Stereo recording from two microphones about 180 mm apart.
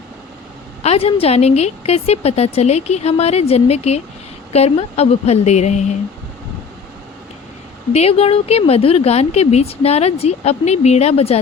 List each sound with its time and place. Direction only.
0.8 s speech: 35° left (ahead or behind)
7.9 s speech: 35° left (ahead or behind)